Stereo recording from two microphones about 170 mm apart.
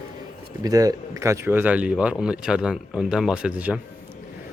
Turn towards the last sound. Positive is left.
turn(degrees=-10)  # may be behind; listen again after turning